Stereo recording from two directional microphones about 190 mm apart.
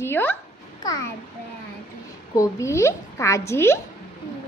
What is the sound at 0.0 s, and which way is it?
A child's voice, 10° left (ahead or behind).